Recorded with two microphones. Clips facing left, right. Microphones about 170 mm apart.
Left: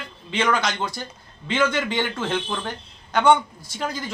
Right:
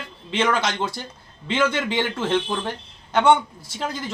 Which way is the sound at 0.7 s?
30° right (ahead or behind).